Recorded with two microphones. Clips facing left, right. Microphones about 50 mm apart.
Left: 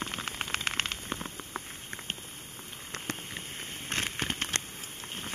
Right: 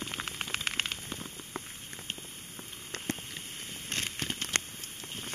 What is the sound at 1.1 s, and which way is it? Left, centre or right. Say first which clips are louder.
Rain on surface: left 3 dB; left.